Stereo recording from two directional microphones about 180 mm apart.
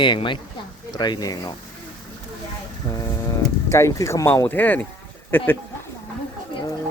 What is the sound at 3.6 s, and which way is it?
Speech, 15° left (ahead or behind).